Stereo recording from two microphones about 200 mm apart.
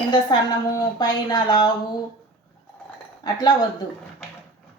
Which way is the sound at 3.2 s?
20° left (ahead or behind).